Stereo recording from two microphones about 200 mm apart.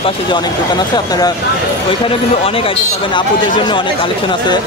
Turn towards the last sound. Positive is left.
turn(degrees=25)  # may be behind; listen again after turning